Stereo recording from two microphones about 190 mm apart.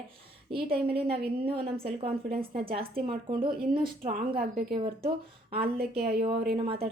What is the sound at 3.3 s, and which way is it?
Speech, 25° right (ahead or behind).